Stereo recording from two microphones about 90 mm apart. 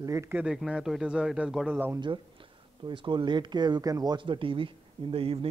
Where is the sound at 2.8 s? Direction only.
60° right (ahead or behind); by 4.1 s 45° right (ahead or behind).